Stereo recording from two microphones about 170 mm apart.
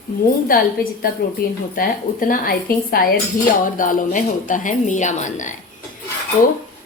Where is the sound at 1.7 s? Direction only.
55° left (ahead or behind).